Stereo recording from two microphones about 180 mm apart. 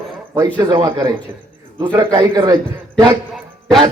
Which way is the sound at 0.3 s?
25° right (ahead or behind).